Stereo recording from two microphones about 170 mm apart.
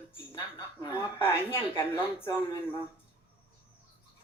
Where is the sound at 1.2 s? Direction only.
15° left (ahead or behind).